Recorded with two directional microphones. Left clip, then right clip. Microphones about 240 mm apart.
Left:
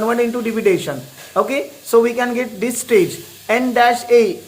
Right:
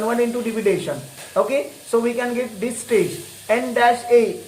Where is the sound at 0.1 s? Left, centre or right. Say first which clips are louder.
Left 3 dB; left.